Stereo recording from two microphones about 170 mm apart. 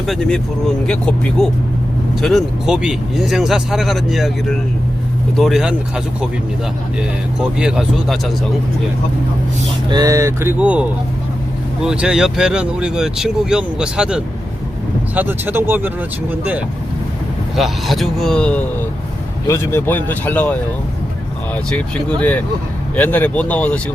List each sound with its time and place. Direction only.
0.0 s speech: centre (ahead or behind)
7.3 s speech: 5° right (ahead or behind)
9.9 s speech: 20° right (ahead or behind)
17.6 s speech: centre (ahead or behind)